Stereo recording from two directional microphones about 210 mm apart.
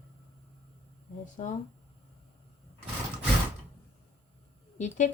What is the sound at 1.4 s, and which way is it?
Speech, 35° left (ahead or behind).